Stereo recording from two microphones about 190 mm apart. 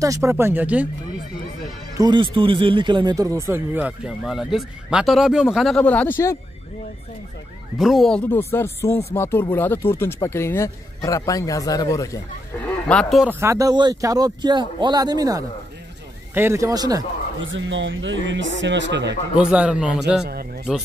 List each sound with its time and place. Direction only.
0.0 s speech: 15° right (ahead or behind)
2.0 s speech: 25° right (ahead or behind); by 6.3 s 10° left (ahead or behind)
7.7 s speech: centre (ahead or behind); by 12.2 s 15° left (ahead or behind)
12.8 s speech: 5° left (ahead or behind)
13.4 s speech: 15° right (ahead or behind)
17.4 s speech: 80° right
19.3 s speech: 5° right (ahead or behind)
20.2 s speech: 55° right (ahead or behind)